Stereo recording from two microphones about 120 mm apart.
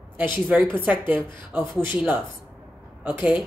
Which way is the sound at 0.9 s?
10° right (ahead or behind).